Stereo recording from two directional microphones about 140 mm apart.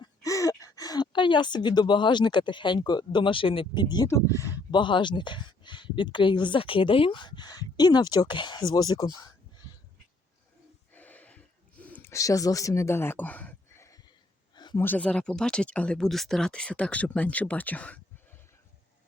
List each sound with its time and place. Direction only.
0.0 s speech: 25° left (ahead or behind)
4.7 s speech: 35° left (ahead or behind)
10.9 s a sound: 10° left (ahead or behind)
12.1 s speech: 25° left (ahead or behind)
14.5 s a sound: 35° left (ahead or behind)
14.8 s speech: 10° left (ahead or behind)